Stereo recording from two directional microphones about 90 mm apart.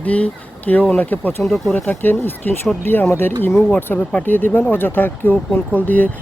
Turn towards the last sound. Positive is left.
turn(degrees=20)  # may be behind; listen again after turning